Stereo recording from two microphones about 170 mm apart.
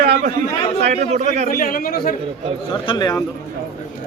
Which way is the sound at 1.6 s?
55° left (ahead or behind).